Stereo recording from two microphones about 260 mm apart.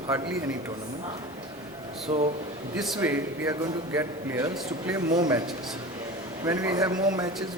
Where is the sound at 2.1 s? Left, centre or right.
Right.